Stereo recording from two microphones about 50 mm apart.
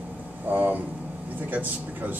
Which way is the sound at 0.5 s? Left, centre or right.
Right.